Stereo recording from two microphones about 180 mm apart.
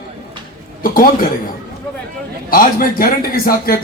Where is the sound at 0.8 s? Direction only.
50° left (ahead or behind).